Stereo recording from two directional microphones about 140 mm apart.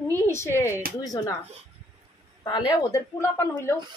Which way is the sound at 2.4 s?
30° left (ahead or behind).